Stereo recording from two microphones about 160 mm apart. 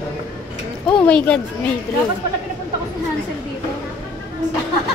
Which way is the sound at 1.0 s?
5° left (ahead or behind).